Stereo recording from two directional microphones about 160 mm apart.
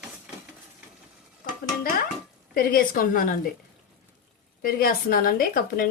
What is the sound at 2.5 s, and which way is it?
Speech, 60° left (ahead or behind).